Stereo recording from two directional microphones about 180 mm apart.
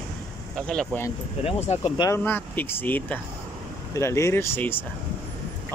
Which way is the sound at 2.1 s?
10° left (ahead or behind).